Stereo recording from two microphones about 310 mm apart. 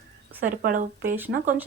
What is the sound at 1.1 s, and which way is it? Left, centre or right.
Speech, centre.